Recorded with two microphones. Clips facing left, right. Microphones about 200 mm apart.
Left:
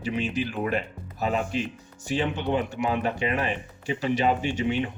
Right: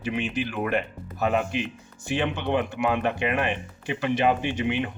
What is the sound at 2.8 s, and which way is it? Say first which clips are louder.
Speech: right 1 dB; 55° right (ahead or behind).